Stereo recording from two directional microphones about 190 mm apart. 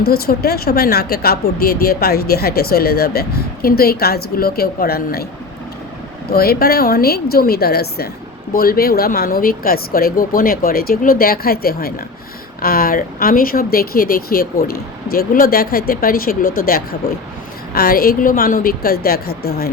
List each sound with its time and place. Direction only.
0.0 s a woman's voice: 55° left (ahead or behind)
6.3 s a woman's voice: 55° left (ahead or behind)